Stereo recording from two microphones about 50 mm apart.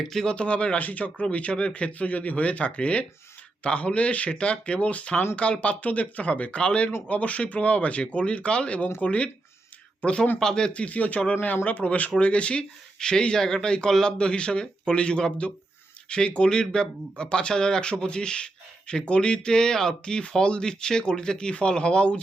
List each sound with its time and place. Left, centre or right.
0.1 s speech: centre
0.3 s speech: left
10.8 s speech: left